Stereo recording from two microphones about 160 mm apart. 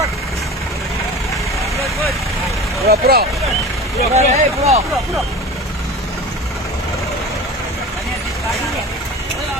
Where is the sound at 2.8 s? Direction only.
75° right (ahead or behind).